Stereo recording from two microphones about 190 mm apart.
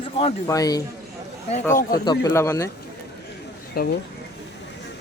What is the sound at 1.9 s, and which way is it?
Speech, 20° left (ahead or behind).